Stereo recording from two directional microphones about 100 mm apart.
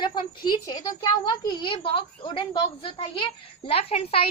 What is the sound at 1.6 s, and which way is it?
A woman's voice, 65° left (ahead or behind).